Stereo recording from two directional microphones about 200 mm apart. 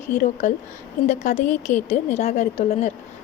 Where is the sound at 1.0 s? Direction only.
35° left (ahead or behind).